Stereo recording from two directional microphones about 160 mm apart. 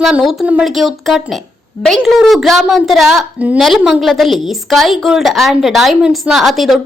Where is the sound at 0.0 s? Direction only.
5° right (ahead or behind).